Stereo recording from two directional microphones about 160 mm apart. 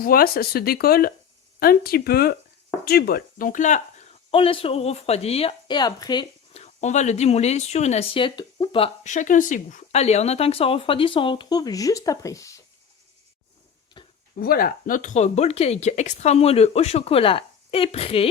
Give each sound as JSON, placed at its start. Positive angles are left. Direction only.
{"t": 0.0, "sound": "speech", "side_deg": 65}
{"t": 4.3, "sound": "speech", "side_deg": 35}
{"t": 6.5, "sound": "speech", "side_deg": 45}
{"t": 9.0, "sound": "speech", "side_deg": 50}
{"t": 14.0, "sound": "a sound", "side_deg": 30}
{"t": 14.3, "sound": "speech", "side_deg": 65}